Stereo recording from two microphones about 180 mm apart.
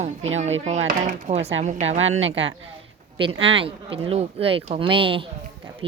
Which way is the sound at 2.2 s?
90° right.